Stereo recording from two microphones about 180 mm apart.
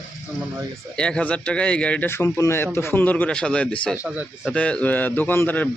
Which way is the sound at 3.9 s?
10° right (ahead or behind).